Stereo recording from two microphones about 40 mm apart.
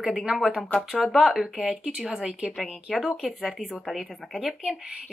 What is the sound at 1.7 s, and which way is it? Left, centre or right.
Speech, centre.